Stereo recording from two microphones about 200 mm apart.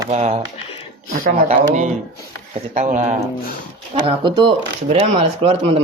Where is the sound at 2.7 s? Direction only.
40° right (ahead or behind).